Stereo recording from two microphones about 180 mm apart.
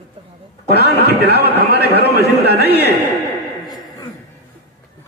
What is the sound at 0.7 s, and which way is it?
Speech, 65° right (ahead or behind).